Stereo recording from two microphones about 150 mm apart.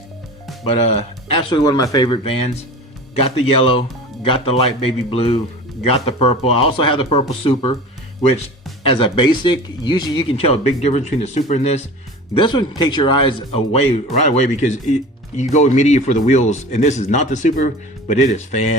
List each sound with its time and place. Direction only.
0.6 s speech: 40° left (ahead or behind)
8.8 s speech: 35° left (ahead or behind)
12.3 s speech: 30° left (ahead or behind)
14.6 s speech: 55° left (ahead or behind)